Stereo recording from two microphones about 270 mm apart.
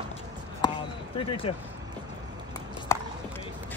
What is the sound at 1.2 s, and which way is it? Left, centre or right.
Speech, centre.